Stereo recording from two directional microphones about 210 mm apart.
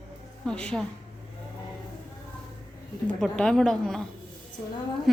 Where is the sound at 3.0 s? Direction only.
5° left (ahead or behind).